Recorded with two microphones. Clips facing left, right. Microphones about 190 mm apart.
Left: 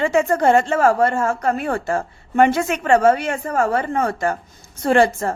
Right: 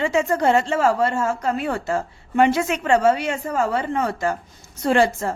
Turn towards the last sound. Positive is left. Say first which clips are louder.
# left 2 dB
turn(degrees=55)  # may be behind; listen again after turning